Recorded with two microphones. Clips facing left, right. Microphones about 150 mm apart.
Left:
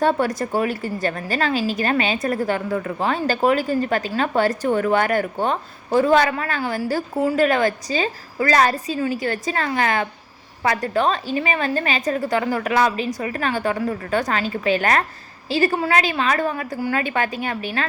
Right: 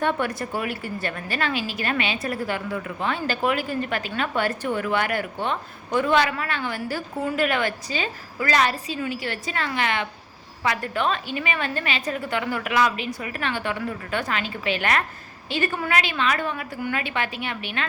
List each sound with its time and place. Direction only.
0.0 s a woman's voice: 35° left (ahead or behind)